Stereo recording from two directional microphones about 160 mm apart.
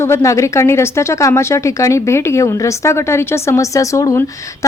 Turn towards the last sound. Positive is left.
turn(degrees=20)  # may be behind; listen again after turning